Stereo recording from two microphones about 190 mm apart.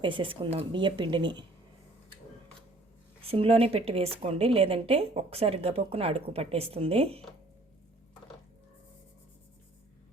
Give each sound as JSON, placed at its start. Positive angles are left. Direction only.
{"t": 0.0, "sound": "a woman's voice", "side_deg": -25}
{"t": 3.2, "sound": "a woman's voice", "side_deg": -30}